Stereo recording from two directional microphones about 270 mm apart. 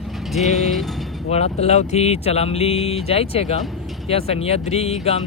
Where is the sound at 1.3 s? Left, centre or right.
Left.